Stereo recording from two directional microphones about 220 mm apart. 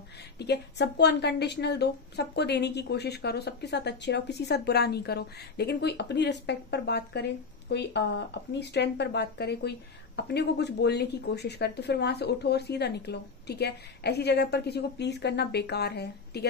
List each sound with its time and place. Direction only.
0.4 s speech: 50° left (ahead or behind)